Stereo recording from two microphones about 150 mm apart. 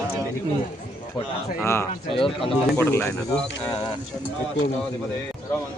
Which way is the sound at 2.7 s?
15° left (ahead or behind).